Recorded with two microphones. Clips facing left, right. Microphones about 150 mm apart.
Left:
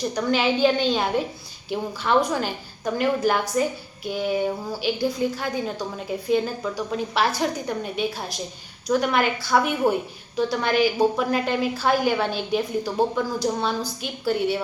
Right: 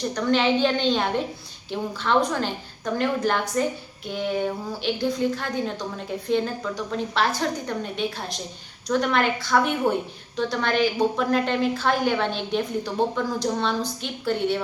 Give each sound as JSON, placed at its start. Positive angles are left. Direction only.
{"t": 0.1, "sound": "a woman's voice", "side_deg": 10}